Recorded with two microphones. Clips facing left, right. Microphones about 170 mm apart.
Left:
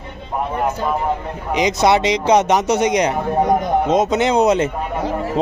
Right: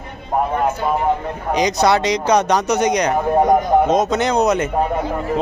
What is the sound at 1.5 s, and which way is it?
Speech, 25° left (ahead or behind).